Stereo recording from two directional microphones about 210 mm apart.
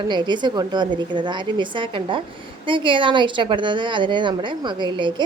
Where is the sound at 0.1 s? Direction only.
20° right (ahead or behind).